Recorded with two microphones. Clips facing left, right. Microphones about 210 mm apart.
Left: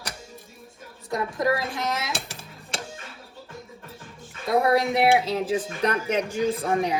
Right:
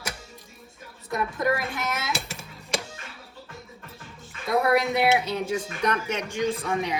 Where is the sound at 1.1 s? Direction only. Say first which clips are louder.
Left 1 dB; 25° left (ahead or behind).